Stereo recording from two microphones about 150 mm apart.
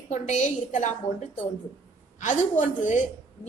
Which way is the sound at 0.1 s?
55° left (ahead or behind).